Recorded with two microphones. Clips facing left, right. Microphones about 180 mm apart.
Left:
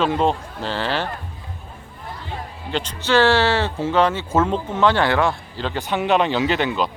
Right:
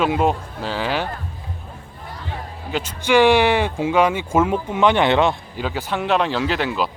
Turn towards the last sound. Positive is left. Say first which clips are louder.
# left 1 dB
turn(degrees=-5)  # may be behind; listen again after turning